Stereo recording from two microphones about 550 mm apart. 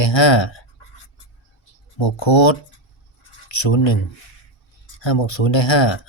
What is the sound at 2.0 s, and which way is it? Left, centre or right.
Speech, left.